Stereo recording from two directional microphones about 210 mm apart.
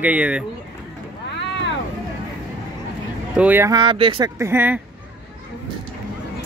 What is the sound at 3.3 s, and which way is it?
Speech, 10° right (ahead or behind).